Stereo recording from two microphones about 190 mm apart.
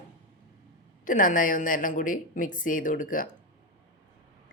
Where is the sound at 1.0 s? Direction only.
45° left (ahead or behind).